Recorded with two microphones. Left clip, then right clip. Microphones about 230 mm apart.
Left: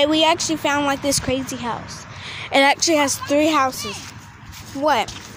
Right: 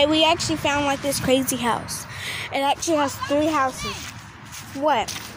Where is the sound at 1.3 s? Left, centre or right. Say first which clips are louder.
Right 3 dB; centre.